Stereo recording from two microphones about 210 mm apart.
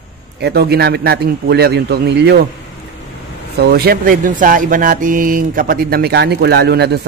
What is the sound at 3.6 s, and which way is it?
Speech, 50° right (ahead or behind).